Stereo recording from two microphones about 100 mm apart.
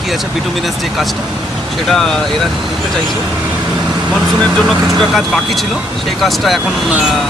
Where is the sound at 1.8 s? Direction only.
5° left (ahead or behind).